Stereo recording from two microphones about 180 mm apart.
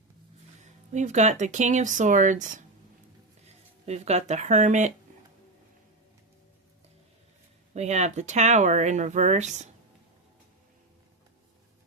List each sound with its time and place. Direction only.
0.6 s speech: 40° right (ahead or behind)
7.7 s speech: 35° right (ahead or behind)